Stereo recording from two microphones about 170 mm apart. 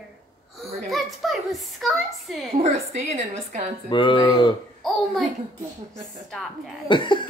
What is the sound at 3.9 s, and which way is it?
Speech, 30° left (ahead or behind).